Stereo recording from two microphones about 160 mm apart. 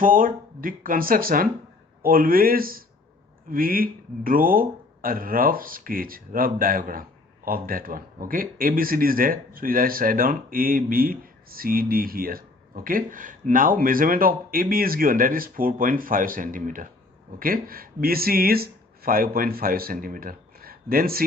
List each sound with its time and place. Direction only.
0.0 s speech: 60° right (ahead or behind)